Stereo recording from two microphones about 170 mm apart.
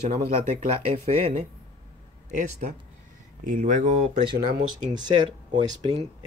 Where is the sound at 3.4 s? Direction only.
50° right (ahead or behind).